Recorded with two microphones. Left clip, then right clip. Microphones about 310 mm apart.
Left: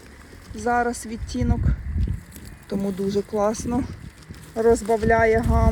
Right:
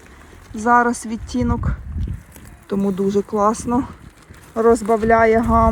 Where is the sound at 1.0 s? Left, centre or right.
Centre.